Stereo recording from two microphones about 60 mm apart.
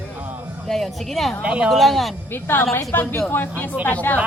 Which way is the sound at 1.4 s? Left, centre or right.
Centre.